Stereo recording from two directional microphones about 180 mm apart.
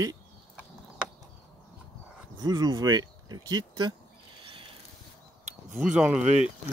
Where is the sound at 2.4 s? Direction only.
20° right (ahead or behind).